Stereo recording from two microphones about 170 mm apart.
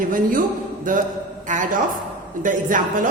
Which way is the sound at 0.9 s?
50° right (ahead or behind).